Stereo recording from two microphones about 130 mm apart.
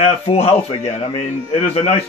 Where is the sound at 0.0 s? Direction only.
50° left (ahead or behind).